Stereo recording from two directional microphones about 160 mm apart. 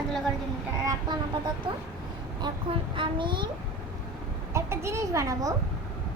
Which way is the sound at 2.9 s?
30° right (ahead or behind).